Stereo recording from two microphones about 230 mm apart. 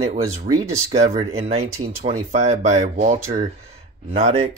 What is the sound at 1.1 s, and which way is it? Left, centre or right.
Speech, right.